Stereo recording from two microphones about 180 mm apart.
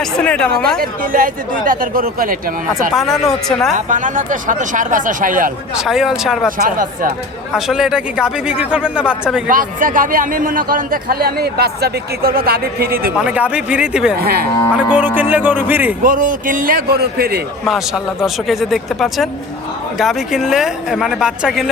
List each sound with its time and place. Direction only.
0.0 s speech: 5° left (ahead or behind)
0.8 s speech: 50° right (ahead or behind)
2.9 s speech: centre (ahead or behind)
3.8 s speech: 45° right (ahead or behind)
5.7 s speech: 5° right (ahead or behind)
7.5 s speech: centre (ahead or behind)
9.5 s a man's voice: 50° right (ahead or behind)
13.1 s speech: 5° right (ahead or behind)
14.2 s a man's voice: 60° right (ahead or behind)
14.9 s speech: 10° right (ahead or behind)
16.0 s speech: 50° right (ahead or behind)
17.7 s speech: centre (ahead or behind)